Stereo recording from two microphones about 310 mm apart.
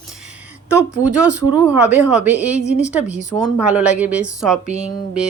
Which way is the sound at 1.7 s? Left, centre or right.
Right.